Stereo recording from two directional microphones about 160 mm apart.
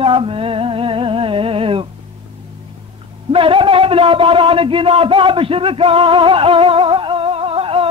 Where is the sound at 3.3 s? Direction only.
35° right (ahead or behind).